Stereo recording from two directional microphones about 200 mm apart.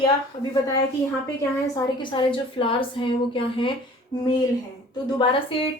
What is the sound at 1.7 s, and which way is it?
A woman's voice, 25° left (ahead or behind).